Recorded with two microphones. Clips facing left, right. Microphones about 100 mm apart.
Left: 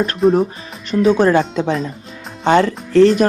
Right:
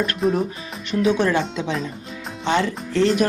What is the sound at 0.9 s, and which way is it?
Speech, 40° left (ahead or behind).